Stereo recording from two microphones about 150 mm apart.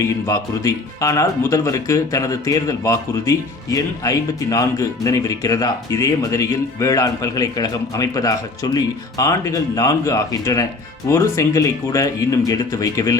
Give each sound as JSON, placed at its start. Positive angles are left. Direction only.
{"t": 0.0, "sound": "speech", "side_deg": 20}